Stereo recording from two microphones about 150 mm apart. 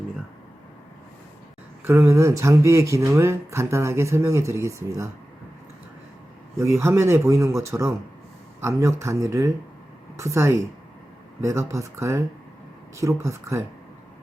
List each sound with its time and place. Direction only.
1.8 s speech: 15° right (ahead or behind)
6.6 s speech: 20° right (ahead or behind)